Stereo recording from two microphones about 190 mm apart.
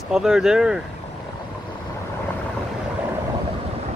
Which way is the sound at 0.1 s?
Centre (ahead or behind).